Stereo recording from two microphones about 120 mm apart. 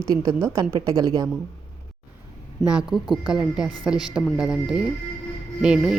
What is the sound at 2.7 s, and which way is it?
Speech, 5° right (ahead or behind).